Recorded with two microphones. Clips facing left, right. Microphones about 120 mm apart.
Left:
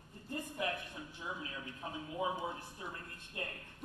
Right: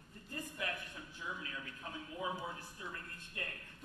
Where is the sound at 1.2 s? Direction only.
25° left (ahead or behind).